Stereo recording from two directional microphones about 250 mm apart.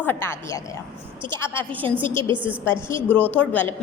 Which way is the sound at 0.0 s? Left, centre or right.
Centre.